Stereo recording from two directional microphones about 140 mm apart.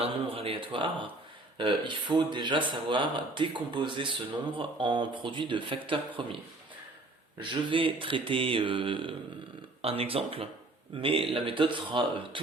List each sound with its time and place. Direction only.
0.0 s a man's voice: 40° right (ahead or behind)
7.5 s speech: 40° right (ahead or behind)